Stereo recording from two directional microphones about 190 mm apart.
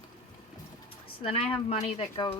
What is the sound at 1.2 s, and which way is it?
Speech, 30° left (ahead or behind).